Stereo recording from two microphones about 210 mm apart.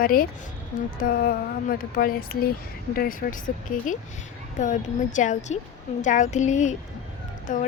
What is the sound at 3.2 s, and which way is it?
Speech, 40° left (ahead or behind).